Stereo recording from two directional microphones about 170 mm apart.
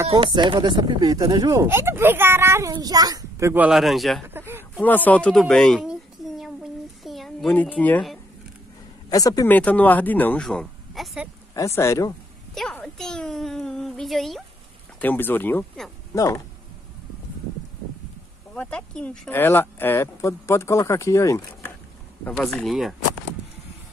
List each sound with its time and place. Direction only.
0.1 s a child's voice: 30° right (ahead or behind); by 4.2 s centre (ahead or behind)
4.3 s a sound: 15° right (ahead or behind)
4.7 s speech: 10° left (ahead or behind)
7.0 s a sound: centre (ahead or behind)
9.1 s speech: 20° left (ahead or behind)
9.5 s speech: 10° left (ahead or behind)
11.5 s speech: 15° left (ahead or behind)
12.5 s a woman's voice: centre (ahead or behind)
15.0 s speech: 10° left (ahead or behind)
16.2 s speech: 20° left (ahead or behind)
18.5 s speech: 5° left (ahead or behind)
22.2 s a woman's voice: 5° left (ahead or behind)